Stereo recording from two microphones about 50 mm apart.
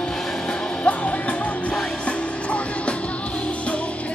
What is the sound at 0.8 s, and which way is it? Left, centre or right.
Music, left.